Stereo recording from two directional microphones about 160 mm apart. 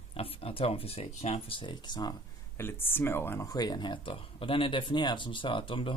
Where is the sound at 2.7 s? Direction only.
15° left (ahead or behind); by 5.9 s 30° left (ahead or behind).